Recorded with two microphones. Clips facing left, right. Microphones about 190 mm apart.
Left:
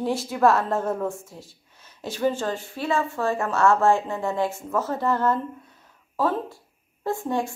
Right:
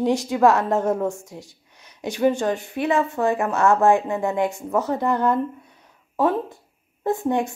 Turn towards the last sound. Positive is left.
turn(degrees=-20)  # may be behind; listen again after turning